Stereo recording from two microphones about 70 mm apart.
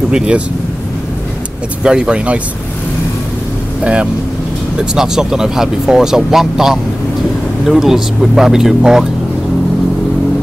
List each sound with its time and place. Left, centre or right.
0.1 s speech: centre
1.8 s speech: centre
3.8 s speech: centre